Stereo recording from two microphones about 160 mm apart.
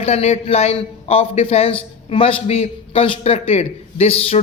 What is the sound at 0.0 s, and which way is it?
A man's voice, 40° left (ahead or behind).